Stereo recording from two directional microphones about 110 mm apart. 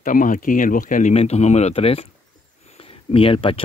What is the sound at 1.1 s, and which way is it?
Speech, 80° left.